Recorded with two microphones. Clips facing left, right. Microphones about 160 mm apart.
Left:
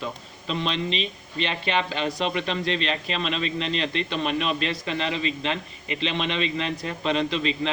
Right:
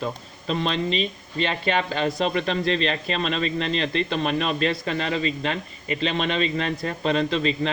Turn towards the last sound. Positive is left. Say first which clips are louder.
# right 2 dB
turn(degrees=-40)  # may be behind; listen again after turning